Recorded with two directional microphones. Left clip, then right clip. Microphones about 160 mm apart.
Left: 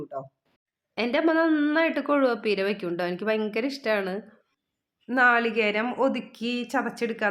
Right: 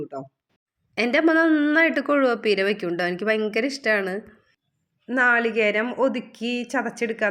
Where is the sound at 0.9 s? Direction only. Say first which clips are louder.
Right 4 dB; 10° right (ahead or behind).